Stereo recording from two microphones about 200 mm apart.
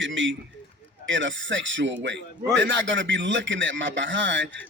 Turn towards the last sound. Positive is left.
turn(degrees=-65)  # may be behind; listen again after turning